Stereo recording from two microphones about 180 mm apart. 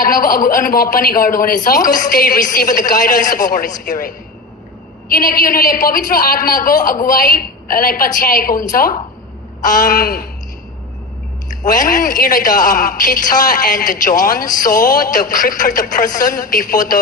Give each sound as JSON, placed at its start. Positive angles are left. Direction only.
{"t": 0.0, "sound": "a woman's voice", "side_deg": 50}
{"t": 11.4, "sound": "a woman's voice", "side_deg": 45}